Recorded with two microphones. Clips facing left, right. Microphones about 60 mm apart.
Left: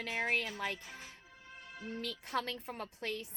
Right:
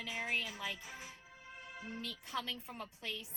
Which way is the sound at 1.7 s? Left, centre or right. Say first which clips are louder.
Left 3 dB; centre.